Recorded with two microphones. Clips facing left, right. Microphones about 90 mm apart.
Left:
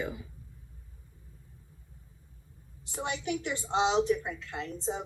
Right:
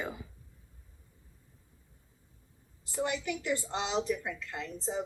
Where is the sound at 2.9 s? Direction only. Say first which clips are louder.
Even; 60° left (ahead or behind).